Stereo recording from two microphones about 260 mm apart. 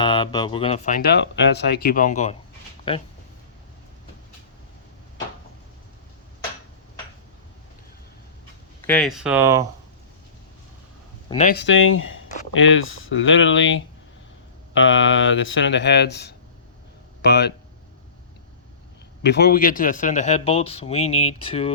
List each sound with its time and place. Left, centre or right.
0.0 s a man's voice: centre
8.9 s speech: centre
11.3 s a man's voice: left
11.5 s speech: left
19.2 s a man's voice: left